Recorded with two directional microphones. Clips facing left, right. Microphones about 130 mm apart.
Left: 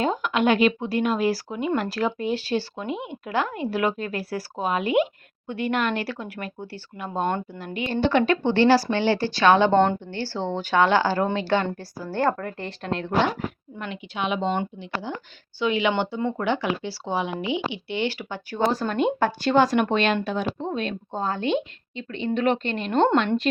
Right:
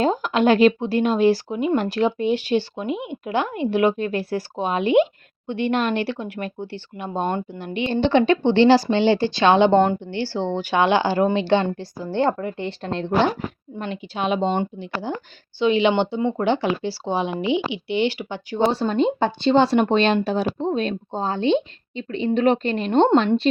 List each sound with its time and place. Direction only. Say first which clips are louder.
0.0 s a woman's voice: right 3 dB; 35° right (ahead or behind); by 12.6 s 20° right (ahead or behind)
12.6 s a woman's voice: even; 30° right (ahead or behind)